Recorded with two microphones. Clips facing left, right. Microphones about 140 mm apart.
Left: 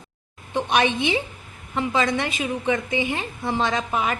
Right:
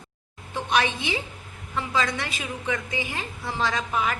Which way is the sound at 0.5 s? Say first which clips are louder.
Left 4 dB; 20° left (ahead or behind).